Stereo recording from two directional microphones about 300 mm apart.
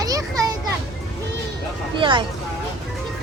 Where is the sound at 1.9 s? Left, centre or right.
Centre.